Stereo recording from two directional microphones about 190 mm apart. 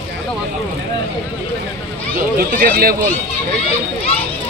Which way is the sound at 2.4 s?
50° right (ahead or behind).